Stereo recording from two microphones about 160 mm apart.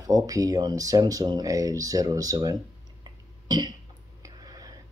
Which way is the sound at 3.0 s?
25° right (ahead or behind).